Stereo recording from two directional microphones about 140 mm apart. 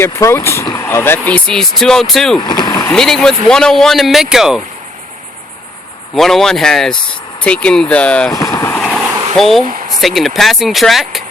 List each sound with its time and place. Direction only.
0.0 s speech: 20° left (ahead or behind); by 2.4 s centre (ahead or behind)
2.4 s speech: 30° left (ahead or behind)
2.9 s speech: 5° left (ahead or behind)
6.1 s speech: centre (ahead or behind)
8.3 s vehicle: 25° left (ahead or behind)
8.8 s a sound: centre (ahead or behind)
9.6 s a sound: 75° right (ahead or behind)
10.0 s speech: centre (ahead or behind)